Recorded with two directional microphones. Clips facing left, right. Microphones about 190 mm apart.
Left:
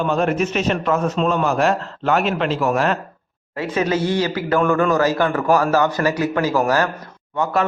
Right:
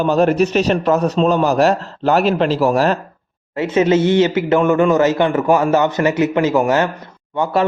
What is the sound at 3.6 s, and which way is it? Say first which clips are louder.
A man's voice: right 6 dB; 25° right (ahead or behind).